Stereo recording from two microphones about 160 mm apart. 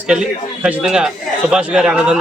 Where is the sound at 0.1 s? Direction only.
5° right (ahead or behind).